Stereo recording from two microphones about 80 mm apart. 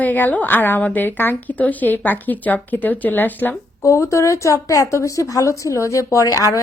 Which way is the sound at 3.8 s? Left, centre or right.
Left.